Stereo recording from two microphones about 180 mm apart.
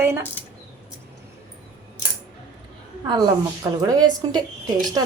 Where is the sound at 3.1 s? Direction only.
20° right (ahead or behind).